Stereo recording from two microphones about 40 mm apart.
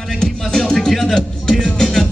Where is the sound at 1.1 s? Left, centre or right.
Centre.